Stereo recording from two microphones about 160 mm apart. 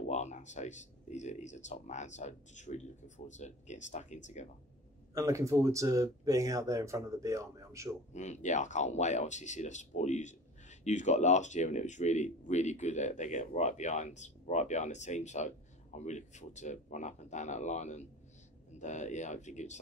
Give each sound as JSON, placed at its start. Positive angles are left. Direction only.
{"t": 0.1, "sound": "speech", "side_deg": 45}
{"t": 5.1, "sound": "speech", "side_deg": -20}
{"t": 8.1, "sound": "speech", "side_deg": 50}